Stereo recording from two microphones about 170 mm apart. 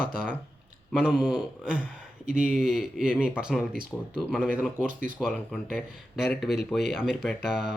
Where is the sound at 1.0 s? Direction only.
5° right (ahead or behind).